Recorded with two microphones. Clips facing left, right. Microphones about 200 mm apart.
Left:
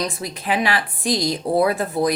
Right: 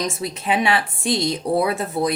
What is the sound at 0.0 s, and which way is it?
A woman's voice, 25° right (ahead or behind).